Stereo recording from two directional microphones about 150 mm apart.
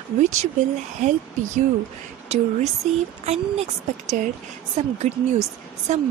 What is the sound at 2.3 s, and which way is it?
Speech, 45° right (ahead or behind).